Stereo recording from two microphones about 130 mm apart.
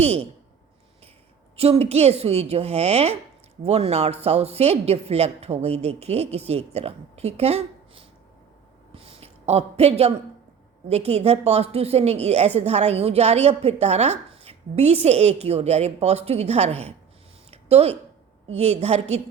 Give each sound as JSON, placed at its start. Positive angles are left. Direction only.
{"t": 0.0, "sound": "a woman's voice", "side_deg": -50}
{"t": 1.5, "sound": "a woman's voice", "side_deg": -50}
{"t": 8.9, "sound": "a sound", "side_deg": -45}
{"t": 10.8, "sound": "a woman's voice", "side_deg": -55}
{"t": 17.5, "sound": "a sound", "side_deg": -50}
{"t": 18.4, "sound": "a woman's voice", "side_deg": -55}